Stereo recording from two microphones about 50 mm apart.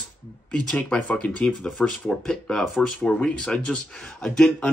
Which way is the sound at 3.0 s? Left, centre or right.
Left.